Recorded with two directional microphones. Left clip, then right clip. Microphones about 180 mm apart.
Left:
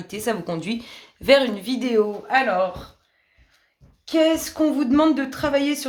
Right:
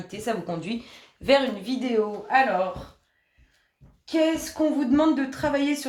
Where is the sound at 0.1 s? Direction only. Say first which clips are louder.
Left 4 dB; 45° left (ahead or behind).